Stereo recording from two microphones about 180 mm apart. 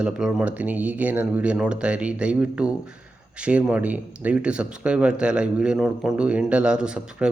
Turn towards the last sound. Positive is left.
turn(degrees=-5)  # may be behind; listen again after turning